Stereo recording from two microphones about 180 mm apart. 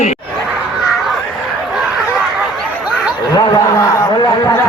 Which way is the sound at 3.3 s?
20° left (ahead or behind).